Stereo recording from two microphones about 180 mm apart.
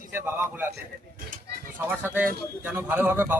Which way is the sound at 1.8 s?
10° right (ahead or behind).